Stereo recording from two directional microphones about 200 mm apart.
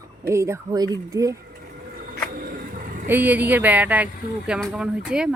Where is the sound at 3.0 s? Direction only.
10° right (ahead or behind).